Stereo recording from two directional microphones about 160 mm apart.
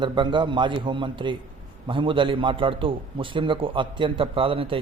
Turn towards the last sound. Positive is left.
turn(degrees=-35)  # may be behind; listen again after turning